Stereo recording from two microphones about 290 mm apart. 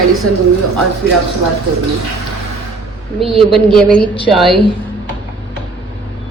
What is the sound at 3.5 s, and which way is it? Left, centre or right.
A woman's voice, centre.